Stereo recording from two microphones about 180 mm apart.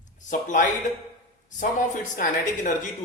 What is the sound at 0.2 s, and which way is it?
Speech, 45° left (ahead or behind).